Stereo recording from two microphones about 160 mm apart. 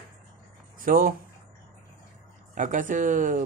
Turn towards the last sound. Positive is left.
turn(degrees=-55)  # may be behind; listen again after turning